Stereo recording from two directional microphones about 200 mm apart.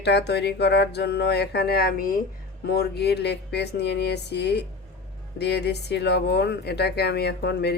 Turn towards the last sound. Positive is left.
turn(degrees=55)  # may be behind; listen again after turning